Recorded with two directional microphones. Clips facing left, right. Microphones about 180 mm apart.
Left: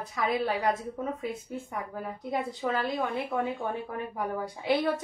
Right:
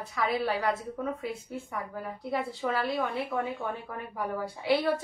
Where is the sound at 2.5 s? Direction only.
25° left (ahead or behind).